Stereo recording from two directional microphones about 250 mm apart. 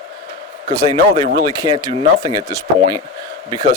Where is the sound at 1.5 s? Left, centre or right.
Centre.